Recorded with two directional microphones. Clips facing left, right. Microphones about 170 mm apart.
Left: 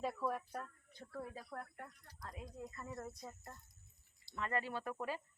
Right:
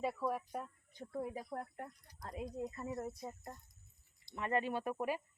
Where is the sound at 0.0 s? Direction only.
10° right (ahead or behind); by 2.8 s 30° right (ahead or behind).